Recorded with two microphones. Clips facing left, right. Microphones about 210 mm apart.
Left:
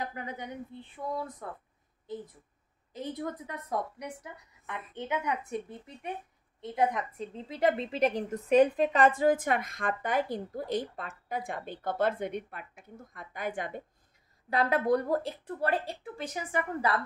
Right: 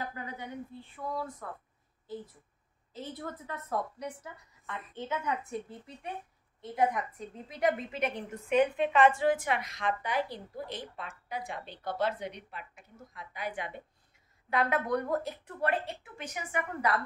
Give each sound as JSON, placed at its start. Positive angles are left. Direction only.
{"t": 0.1, "sound": "a woman's voice", "side_deg": 20}
{"t": 2.9, "sound": "a woman's voice", "side_deg": 15}
{"t": 14.5, "sound": "a woman's voice", "side_deg": 35}